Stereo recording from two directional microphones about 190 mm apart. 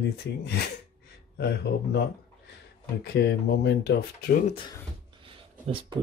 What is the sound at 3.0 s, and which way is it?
Speech, 55° left (ahead or behind).